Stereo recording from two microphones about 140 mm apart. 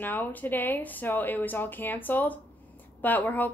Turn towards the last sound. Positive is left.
turn(degrees=10)  # may be behind; listen again after turning